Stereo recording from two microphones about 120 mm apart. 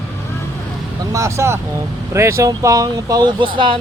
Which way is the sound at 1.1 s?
25° right (ahead or behind).